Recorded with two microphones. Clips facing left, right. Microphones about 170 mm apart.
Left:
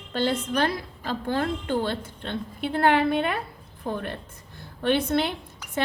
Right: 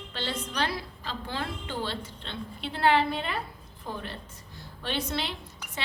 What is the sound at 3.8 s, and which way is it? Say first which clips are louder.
A woman's voice: left 7 dB; 55° left (ahead or behind).